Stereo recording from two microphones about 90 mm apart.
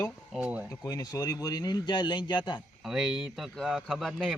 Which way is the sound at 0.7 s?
40° left (ahead or behind).